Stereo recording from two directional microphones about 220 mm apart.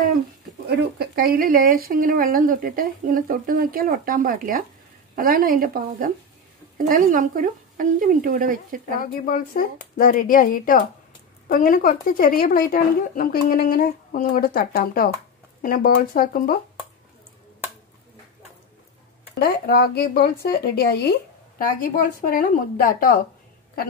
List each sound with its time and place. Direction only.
0.7 s speech: 45° right (ahead or behind)
9.0 s speech: 40° left (ahead or behind)
19.3 s speech: 45° left (ahead or behind)